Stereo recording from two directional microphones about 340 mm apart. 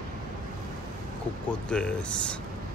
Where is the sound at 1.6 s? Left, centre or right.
Centre.